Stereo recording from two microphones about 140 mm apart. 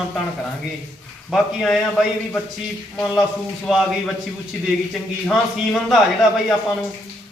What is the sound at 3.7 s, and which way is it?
Speech, centre (ahead or behind).